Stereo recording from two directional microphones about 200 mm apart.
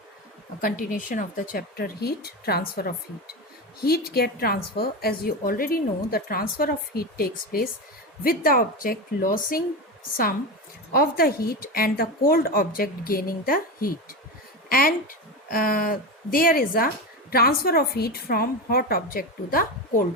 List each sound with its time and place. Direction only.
0.6 s a woman's voice: 45° left (ahead or behind)
10.9 s a woman's voice: 50° left (ahead or behind)